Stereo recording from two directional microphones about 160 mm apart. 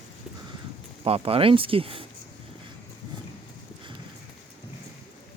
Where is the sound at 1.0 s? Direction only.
35° right (ahead or behind).